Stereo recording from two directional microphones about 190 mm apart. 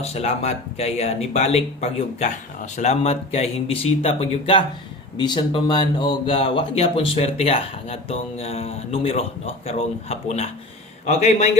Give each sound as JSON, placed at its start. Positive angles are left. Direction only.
{"t": 0.0, "sound": "speech", "side_deg": 35}